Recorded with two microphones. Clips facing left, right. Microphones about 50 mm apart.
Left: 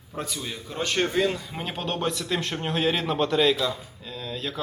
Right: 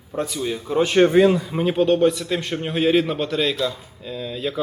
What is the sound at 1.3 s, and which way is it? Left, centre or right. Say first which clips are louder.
A man's voice: right 11 dB; centre.